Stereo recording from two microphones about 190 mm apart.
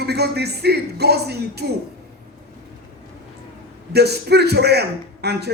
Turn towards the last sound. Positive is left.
turn(degrees=-60)  # may be behind; listen again after turning